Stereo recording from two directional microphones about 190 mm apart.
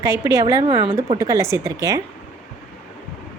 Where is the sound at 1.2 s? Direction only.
15° right (ahead or behind).